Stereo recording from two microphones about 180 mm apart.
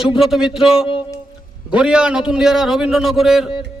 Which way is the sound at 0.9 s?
30° left (ahead or behind).